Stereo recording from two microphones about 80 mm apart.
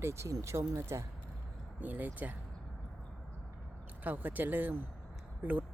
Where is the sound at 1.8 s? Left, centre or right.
Right.